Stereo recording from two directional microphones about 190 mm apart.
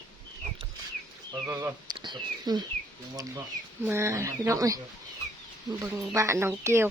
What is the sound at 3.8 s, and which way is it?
Speech, 15° right (ahead or behind).